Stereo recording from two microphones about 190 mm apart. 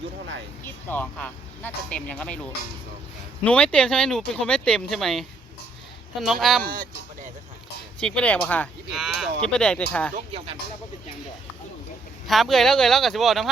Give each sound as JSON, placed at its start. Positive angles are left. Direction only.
{"t": 0.6, "sound": "speech", "side_deg": 10}
{"t": 6.2, "sound": "speech", "side_deg": 0}
{"t": 6.6, "sound": "speech", "side_deg": -50}
{"t": 8.0, "sound": "speech", "side_deg": 5}
{"t": 12.3, "sound": "speech", "side_deg": 0}